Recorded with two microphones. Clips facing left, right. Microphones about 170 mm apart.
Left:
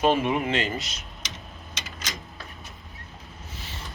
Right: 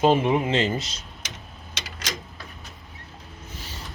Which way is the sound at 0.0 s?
20° right (ahead or behind).